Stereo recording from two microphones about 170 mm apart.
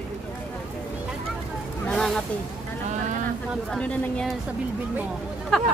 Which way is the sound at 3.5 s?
5° left (ahead or behind).